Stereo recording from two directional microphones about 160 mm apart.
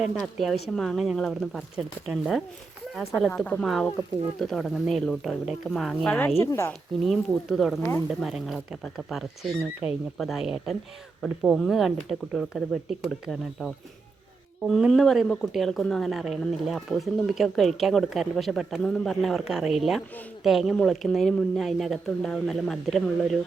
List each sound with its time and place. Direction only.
0.0 s speech: centre (ahead or behind)
6.4 s speech: 15° left (ahead or behind)
7.0 s speech: centre (ahead or behind)